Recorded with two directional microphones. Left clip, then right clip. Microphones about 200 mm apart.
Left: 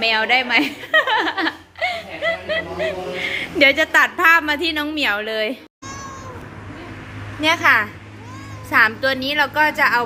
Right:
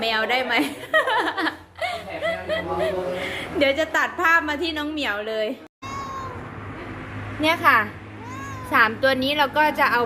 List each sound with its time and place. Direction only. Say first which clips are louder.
0.0 s speech: left 5 dB; 20° left (ahead or behind)
7.4 s a woman's voice: left 3 dB; 5° right (ahead or behind)